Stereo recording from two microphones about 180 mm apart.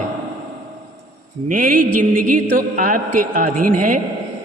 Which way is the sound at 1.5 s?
50° right (ahead or behind).